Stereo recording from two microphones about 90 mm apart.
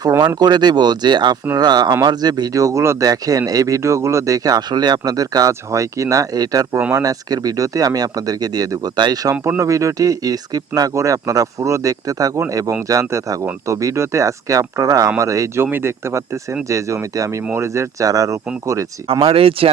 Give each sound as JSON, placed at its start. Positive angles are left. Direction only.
{"t": 0.3, "sound": "speech", "side_deg": -50}
{"t": 9.6, "sound": "speech", "side_deg": -35}
{"t": 15.6, "sound": "speech", "side_deg": -25}
{"t": 19.2, "sound": "speech", "side_deg": -90}